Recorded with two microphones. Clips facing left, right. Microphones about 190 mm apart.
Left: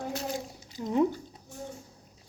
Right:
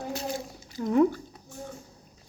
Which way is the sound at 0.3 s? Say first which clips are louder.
Right 2 dB; 20° left (ahead or behind).